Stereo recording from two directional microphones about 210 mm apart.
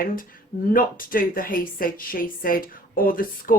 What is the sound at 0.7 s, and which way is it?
A woman's voice, 40° left (ahead or behind).